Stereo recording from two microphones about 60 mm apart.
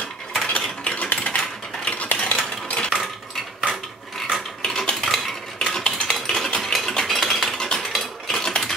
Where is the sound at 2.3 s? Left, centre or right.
Centre.